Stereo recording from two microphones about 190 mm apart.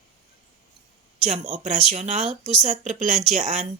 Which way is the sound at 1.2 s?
35° right (ahead or behind).